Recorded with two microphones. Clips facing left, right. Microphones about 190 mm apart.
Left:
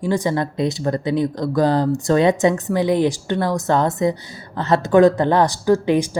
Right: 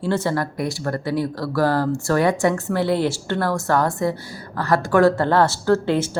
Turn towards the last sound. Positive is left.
turn(degrees=15)  # may be behind; listen again after turning